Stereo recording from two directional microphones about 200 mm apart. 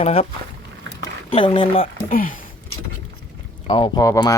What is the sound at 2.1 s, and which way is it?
Speech, 45° left (ahead or behind).